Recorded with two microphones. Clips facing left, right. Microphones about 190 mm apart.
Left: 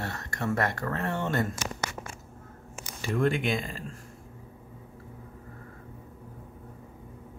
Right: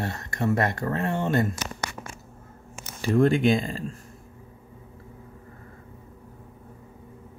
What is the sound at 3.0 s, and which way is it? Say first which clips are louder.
Speech: right 7 dB; 35° right (ahead or behind).